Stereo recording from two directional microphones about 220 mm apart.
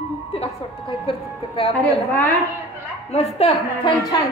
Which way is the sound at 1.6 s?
25° left (ahead or behind).